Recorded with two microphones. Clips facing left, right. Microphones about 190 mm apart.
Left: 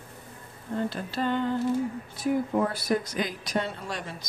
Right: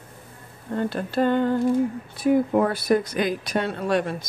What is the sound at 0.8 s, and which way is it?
Speech, 55° right (ahead or behind).